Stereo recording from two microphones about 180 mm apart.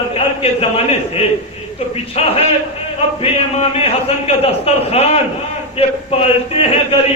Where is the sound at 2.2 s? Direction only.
35° left (ahead or behind).